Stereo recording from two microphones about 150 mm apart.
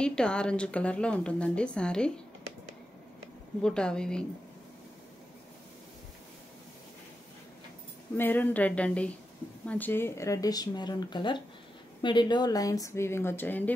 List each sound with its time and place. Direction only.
0.0 s a woman's voice: 5° left (ahead or behind)
3.6 s a woman's voice: 5° left (ahead or behind)
8.2 s a woman's voice: 10° left (ahead or behind)